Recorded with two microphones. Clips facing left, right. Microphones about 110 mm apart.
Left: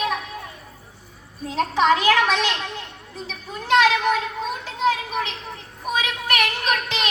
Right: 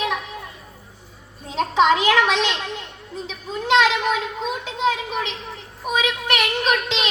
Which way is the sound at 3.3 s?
20° right (ahead or behind).